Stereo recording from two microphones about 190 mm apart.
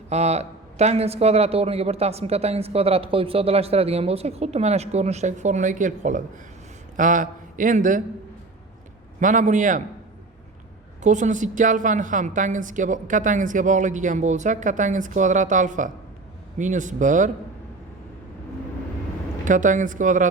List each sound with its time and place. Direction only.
0.1 s a man's voice: 35° right (ahead or behind)
9.2 s a man's voice: 40° right (ahead or behind)
11.0 s a man's voice: 40° right (ahead or behind)
19.5 s speech: 45° right (ahead or behind)